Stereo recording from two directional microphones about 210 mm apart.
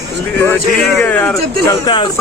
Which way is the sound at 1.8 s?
20° left (ahead or behind).